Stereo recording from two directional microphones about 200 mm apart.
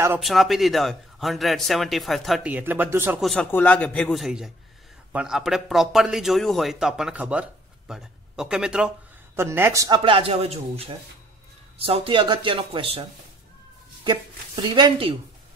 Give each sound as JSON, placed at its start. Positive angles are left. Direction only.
{"t": 0.2, "sound": "speech", "side_deg": 0}
{"t": 3.3, "sound": "speech", "side_deg": 5}
{"t": 14.0, "sound": "speech", "side_deg": -25}